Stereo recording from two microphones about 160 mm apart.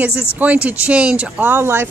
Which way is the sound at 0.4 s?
10° right (ahead or behind).